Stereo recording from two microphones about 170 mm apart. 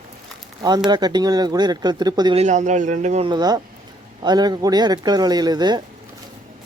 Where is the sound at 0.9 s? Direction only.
25° right (ahead or behind).